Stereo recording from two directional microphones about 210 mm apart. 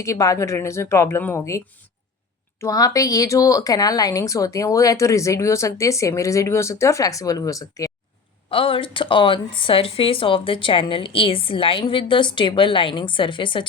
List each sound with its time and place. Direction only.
0.0 s speech: 15° left (ahead or behind)